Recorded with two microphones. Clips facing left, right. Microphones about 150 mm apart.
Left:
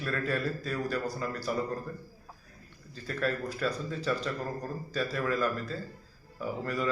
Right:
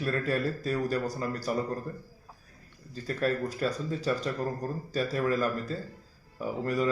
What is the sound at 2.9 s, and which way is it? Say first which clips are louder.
Speech: right 3 dB; 40° right (ahead or behind).